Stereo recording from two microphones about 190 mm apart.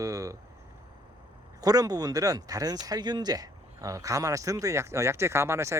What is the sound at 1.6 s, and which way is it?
Speech, 20° right (ahead or behind).